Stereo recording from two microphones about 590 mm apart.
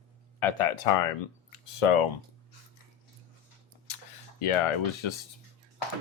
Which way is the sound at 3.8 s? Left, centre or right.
Left.